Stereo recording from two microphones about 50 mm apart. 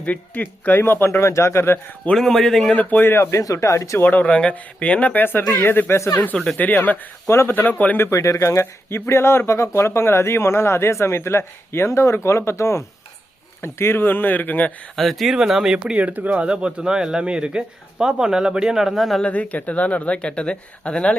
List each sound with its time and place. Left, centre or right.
0.0 s speech: left
0.8 s speech: left
1.2 s speech: left
2.1 s a man's voice: centre
3.0 s speech: left
4.0 s speech: left
4.3 s speech: centre
5.5 s speech: left
8.1 s speech: left
13.6 s speech: left
14.9 s speech: centre
15.4 s speech: centre
16.0 s speech: right; by 19.2 s centre
19.2 s speech: left